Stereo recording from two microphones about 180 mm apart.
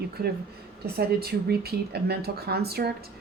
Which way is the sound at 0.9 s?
60° right (ahead or behind).